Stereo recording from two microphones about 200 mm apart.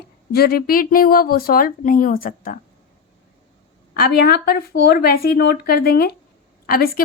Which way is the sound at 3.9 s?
50° left (ahead or behind).